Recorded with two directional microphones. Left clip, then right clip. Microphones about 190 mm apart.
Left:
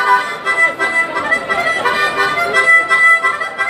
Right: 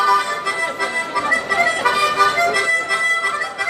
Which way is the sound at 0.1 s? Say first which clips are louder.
Left 4 dB; 15° left (ahead or behind).